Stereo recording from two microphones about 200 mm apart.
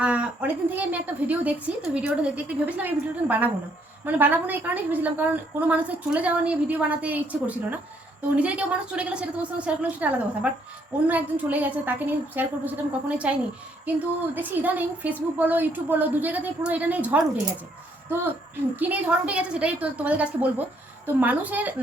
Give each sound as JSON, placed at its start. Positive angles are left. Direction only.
{"t": 0.0, "sound": "a woman's voice", "side_deg": -5}